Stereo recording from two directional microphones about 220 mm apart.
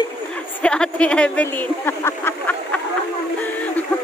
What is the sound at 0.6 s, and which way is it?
Speech, 5° left (ahead or behind).